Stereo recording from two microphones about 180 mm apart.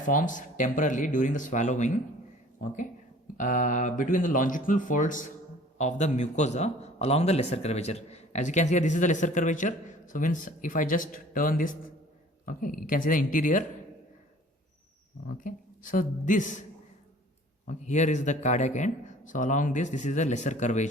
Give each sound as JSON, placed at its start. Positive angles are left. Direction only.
{"t": 0.0, "sound": "a man's voice", "side_deg": 45}
{"t": 3.3, "sound": "a man's voice", "side_deg": 45}
{"t": 15.3, "sound": "a man's voice", "side_deg": 50}
{"t": 17.7, "sound": "speech", "side_deg": 40}